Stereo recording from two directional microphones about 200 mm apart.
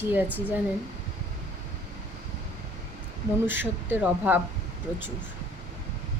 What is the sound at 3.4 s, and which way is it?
Speech, 10° right (ahead or behind).